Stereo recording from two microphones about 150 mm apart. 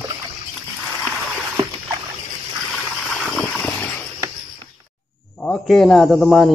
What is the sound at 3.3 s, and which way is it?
Vehicle, 10° left (ahead or behind).